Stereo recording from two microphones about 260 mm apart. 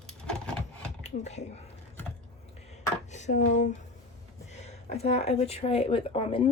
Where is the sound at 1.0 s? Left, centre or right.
Left.